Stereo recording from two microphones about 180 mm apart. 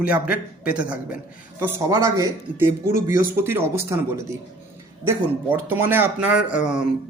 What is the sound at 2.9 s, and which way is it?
Speech, 45° left (ahead or behind).